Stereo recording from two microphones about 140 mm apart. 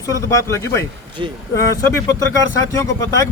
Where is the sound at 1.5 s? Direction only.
25° left (ahead or behind).